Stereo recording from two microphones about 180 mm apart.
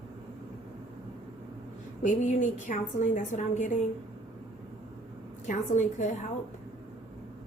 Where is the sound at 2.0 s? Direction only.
45° left (ahead or behind).